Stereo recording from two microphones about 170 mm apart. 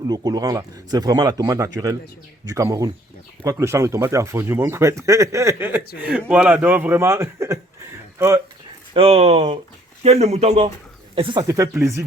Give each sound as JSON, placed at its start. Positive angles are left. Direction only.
{"t": 0.1, "sound": "speech", "side_deg": -25}
{"t": 8.9, "sound": "speech", "side_deg": -35}
{"t": 11.1, "sound": "speech", "side_deg": -30}